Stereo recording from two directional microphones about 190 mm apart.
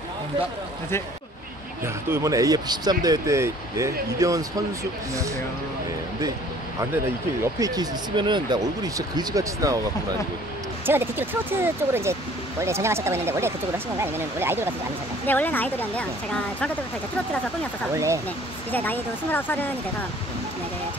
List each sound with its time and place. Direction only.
2.0 s speech: 15° right (ahead or behind)
7.5 s speech: 20° right (ahead or behind)
15.2 s speech: 10° left (ahead or behind)
17.9 s speech: 15° right (ahead or behind)
18.7 s speech: 10° left (ahead or behind)